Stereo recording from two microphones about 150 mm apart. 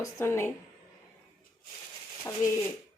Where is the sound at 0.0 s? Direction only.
20° left (ahead or behind).